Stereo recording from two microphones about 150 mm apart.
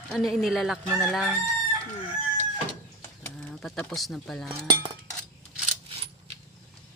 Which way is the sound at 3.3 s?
5° left (ahead or behind).